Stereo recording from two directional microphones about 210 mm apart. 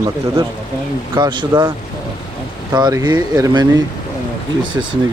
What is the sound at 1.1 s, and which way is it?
Speech, 20° right (ahead or behind).